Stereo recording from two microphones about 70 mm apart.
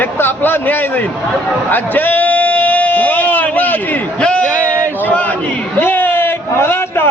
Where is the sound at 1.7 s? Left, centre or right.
Left.